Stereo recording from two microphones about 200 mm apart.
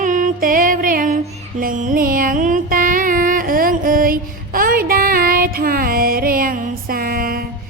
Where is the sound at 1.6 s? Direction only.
40° right (ahead or behind).